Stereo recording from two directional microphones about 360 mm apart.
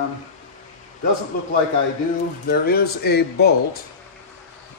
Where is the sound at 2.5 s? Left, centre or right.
Left.